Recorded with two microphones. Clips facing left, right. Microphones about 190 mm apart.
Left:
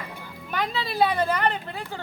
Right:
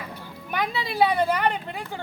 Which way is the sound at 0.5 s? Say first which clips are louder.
Even; 15° right (ahead or behind).